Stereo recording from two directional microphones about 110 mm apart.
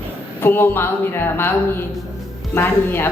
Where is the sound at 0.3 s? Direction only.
20° left (ahead or behind).